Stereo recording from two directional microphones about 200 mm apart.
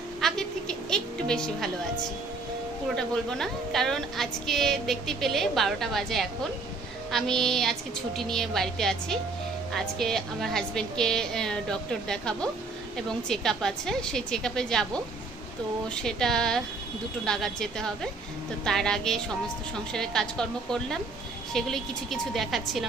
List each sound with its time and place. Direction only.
0.2 s a sound: centre (ahead or behind)
3.0 s a woman's voice: 5° left (ahead or behind)
15.9 s a woman's voice: 5° left (ahead or behind)